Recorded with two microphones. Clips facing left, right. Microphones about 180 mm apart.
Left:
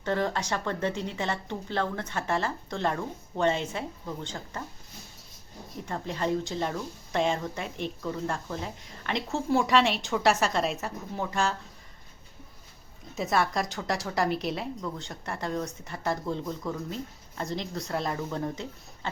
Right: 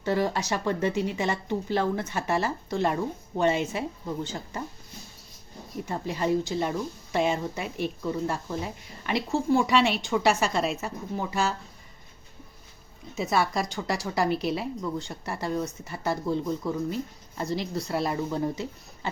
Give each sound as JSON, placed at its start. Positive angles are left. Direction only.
{"t": 0.0, "sound": "speech", "side_deg": -10}
{"t": 5.8, "sound": "a woman's voice", "side_deg": -10}
{"t": 13.1, "sound": "a woman's voice", "side_deg": 0}